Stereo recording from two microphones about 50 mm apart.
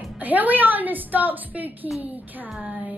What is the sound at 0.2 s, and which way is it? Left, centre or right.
A woman's voice, right.